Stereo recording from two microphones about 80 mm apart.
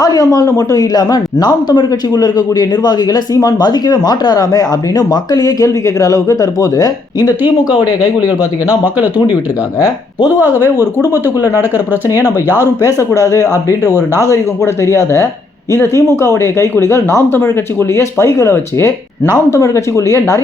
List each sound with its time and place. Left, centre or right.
0.0 s a man's voice: left
10.4 s speech: right
14.3 s speech: left